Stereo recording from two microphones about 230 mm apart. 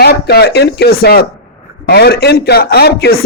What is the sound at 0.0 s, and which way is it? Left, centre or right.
A man's voice, left.